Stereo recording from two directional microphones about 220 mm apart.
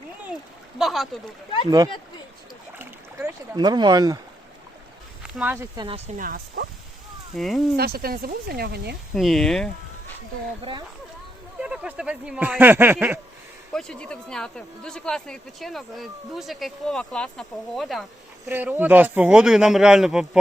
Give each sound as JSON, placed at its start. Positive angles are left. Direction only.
{"t": 0.8, "sound": "speech", "side_deg": 0}
{"t": 2.7, "sound": "boat", "side_deg": -10}
{"t": 5.4, "sound": "speech", "side_deg": -10}
{"t": 6.1, "sound": "speech", "side_deg": -45}
{"t": 7.3, "sound": "speech", "side_deg": 0}
{"t": 7.8, "sound": "speech", "side_deg": -45}
{"t": 9.1, "sound": "speech", "side_deg": 0}
{"t": 10.6, "sound": "speech", "side_deg": -25}
{"t": 11.6, "sound": "speech", "side_deg": -5}
{"t": 13.7, "sound": "speech", "side_deg": 5}